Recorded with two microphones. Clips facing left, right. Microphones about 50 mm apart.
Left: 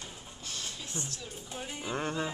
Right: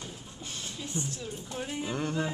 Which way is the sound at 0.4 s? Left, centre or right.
Centre.